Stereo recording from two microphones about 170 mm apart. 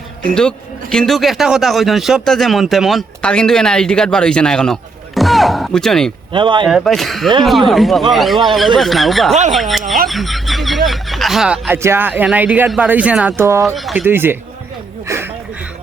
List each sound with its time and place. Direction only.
0.3 s a man's voice: 5° left (ahead or behind)
6.3 s speech: 30° right (ahead or behind)
6.7 s a man's voice: centre (ahead or behind); by 13.7 s 15° right (ahead or behind)
13.7 s speech: 5° right (ahead or behind)
15.0 s a sound: 15° right (ahead or behind)